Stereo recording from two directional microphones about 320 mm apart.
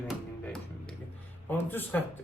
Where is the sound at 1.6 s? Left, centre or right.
Centre.